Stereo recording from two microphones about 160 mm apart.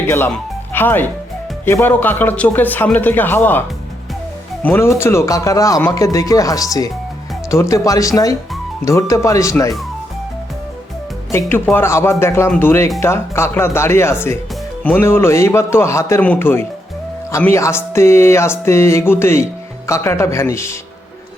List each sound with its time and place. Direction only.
0.7 s speech: 15° left (ahead or behind)
1.6 s music: 15° left (ahead or behind)
4.6 s speech: 15° left (ahead or behind)
11.3 s music: 15° left (ahead or behind)